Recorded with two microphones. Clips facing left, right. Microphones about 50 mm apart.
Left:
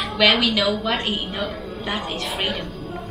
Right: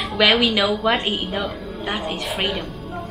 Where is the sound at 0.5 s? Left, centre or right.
Centre.